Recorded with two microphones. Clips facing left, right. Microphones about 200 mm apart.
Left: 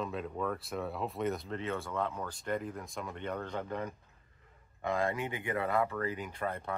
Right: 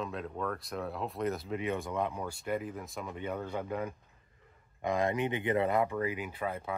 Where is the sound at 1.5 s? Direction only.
15° right (ahead or behind).